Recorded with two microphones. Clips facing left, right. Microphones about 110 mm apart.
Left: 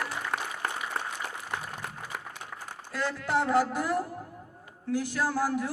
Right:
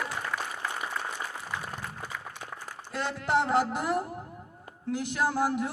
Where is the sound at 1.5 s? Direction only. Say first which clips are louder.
Even; 65° left (ahead or behind).